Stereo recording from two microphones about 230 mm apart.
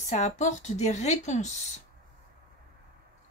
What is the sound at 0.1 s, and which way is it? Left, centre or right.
A woman's voice, left.